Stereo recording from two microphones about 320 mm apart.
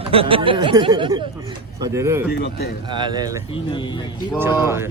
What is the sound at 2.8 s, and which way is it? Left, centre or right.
Speech, centre.